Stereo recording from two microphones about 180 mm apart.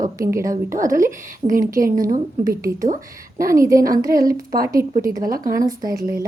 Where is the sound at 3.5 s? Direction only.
15° right (ahead or behind).